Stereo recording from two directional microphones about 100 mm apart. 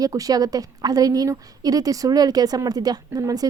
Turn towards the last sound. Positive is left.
turn(degrees=-40)  # may be behind; listen again after turning